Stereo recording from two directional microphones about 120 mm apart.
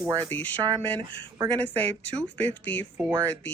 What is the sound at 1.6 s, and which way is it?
Speech, 15° left (ahead or behind).